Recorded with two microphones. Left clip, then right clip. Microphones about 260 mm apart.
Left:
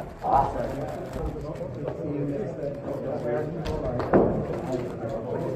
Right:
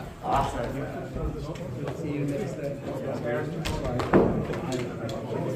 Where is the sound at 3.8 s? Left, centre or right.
Right.